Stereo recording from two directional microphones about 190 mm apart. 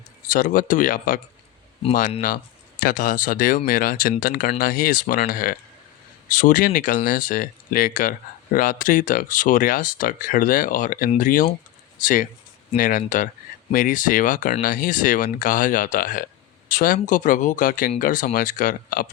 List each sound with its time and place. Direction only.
0.3 s speech: 45° left (ahead or behind)